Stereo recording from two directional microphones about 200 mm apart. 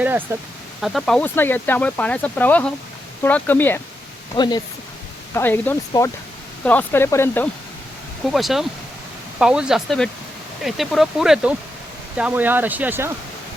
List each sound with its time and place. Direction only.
0.0 s a sound: 10° right (ahead or behind)
0.8 s speech: centre (ahead or behind)
4.4 s speech: 20° left (ahead or behind)
5.3 s speech: 10° left (ahead or behind)
8.3 s speech: centre (ahead or behind)